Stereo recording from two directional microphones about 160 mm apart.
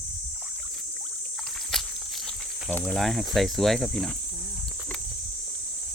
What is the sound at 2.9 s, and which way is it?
Speech, centre (ahead or behind).